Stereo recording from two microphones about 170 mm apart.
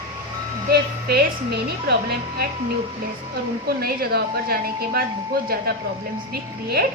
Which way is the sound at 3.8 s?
65° right (ahead or behind).